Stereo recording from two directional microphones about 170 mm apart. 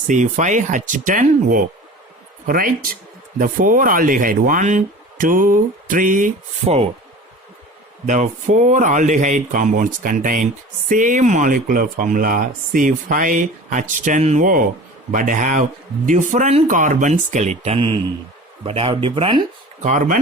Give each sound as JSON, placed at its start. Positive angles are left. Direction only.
{"t": 0.1, "sound": "speech", "side_deg": -45}
{"t": 3.3, "sound": "speech", "side_deg": -50}
{"t": 8.0, "sound": "speech", "side_deg": -45}
{"t": 19.8, "sound": "speech", "side_deg": -50}